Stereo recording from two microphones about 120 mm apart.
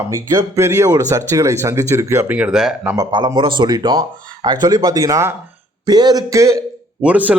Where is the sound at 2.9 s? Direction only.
35° right (ahead or behind).